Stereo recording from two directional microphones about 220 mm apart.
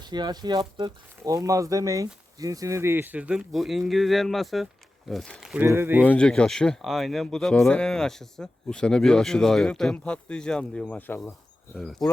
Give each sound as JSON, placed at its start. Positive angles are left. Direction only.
{"t": 0.0, "sound": "speech", "side_deg": -20}
{"t": 6.1, "sound": "speech", "side_deg": 5}